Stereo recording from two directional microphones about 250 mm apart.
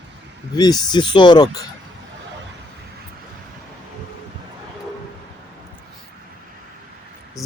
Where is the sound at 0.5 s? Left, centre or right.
Centre.